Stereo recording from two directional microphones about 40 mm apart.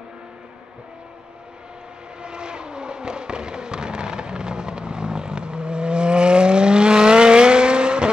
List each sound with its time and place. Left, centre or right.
2.2 s vehicle: right